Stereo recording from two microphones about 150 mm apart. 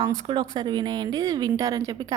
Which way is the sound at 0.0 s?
30° right (ahead or behind).